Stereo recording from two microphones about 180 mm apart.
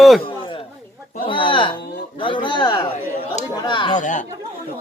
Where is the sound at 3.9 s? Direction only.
45° left (ahead or behind).